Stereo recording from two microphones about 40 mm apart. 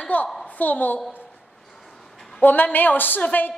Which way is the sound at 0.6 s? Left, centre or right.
Left.